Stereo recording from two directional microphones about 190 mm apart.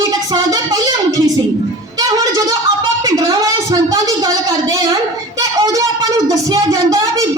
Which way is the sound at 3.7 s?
20° right (ahead or behind).